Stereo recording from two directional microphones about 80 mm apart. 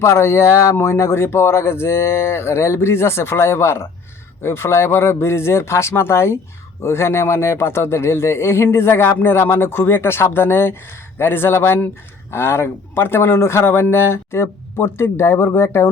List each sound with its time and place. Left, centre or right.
0.0 s speech: left